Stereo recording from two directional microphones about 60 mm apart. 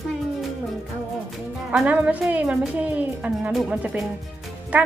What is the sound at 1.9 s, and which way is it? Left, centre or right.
Speech, right.